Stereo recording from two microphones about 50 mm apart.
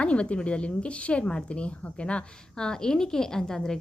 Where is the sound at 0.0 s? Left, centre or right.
Left.